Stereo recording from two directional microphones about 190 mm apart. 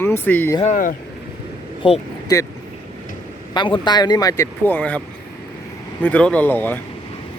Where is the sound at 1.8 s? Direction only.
30° left (ahead or behind).